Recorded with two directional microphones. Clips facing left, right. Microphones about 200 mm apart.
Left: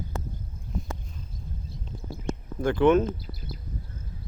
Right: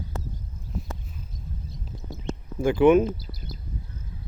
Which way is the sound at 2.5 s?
10° right (ahead or behind).